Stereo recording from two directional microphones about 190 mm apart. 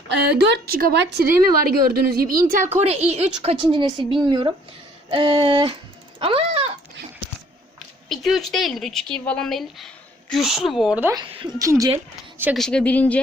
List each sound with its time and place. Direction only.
0.3 s a woman's voice: 55° right (ahead or behind); by 6.7 s 30° right (ahead or behind)
7.8 s speech: centre (ahead or behind)
11.1 s a woman's voice: 25° right (ahead or behind)
12.5 s speech: 5° left (ahead or behind)